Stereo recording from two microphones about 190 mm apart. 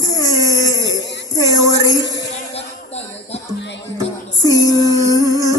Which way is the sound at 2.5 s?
35° left (ahead or behind).